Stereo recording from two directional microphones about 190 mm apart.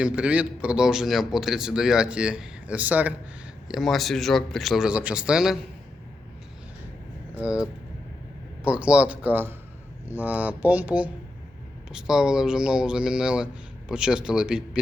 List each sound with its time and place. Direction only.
0.0 s speech: 5° right (ahead or behind)
7.4 s speech: 5° right (ahead or behind)